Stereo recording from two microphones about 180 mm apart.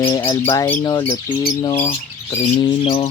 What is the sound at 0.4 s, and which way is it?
Speech, 15° left (ahead or behind).